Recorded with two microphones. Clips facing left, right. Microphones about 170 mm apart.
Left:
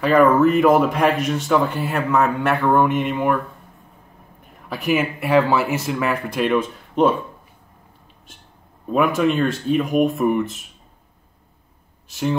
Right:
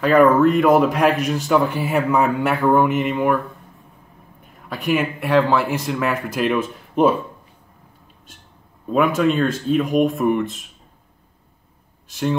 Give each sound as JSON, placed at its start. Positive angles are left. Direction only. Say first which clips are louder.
{"t": 0.0, "sound": "a man's voice", "louder": "right 1 dB", "side_deg": 0}
{"t": 4.5, "sound": "a man's voice", "louder": "even", "side_deg": 0}
{"t": 8.9, "sound": "a man's voice", "louder": "right 1 dB", "side_deg": 0}
{"t": 12.1, "sound": "a man's voice", "louder": "even", "side_deg": 0}